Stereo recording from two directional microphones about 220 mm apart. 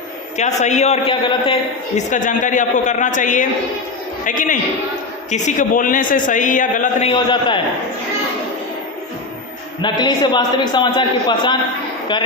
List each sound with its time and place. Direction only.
0.3 s a man's voice: 30° left (ahead or behind)
2.0 s a man's voice: 35° left (ahead or behind)
7.1 s a man's voice: 20° left (ahead or behind)
9.8 s a man's voice: 20° left (ahead or behind)